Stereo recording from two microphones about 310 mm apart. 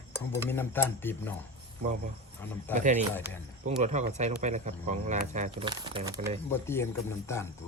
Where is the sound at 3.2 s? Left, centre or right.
Centre.